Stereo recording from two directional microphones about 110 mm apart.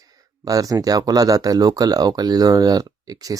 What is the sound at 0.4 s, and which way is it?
Speech, 35° right (ahead or behind).